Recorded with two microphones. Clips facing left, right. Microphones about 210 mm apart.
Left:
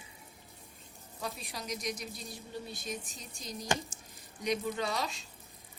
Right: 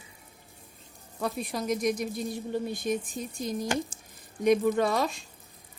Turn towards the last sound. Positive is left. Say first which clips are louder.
# right 9 dB
turn(degrees=-55)  # may be behind; listen again after turning